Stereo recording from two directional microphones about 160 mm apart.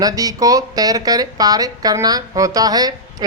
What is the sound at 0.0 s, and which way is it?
Speech, 20° right (ahead or behind).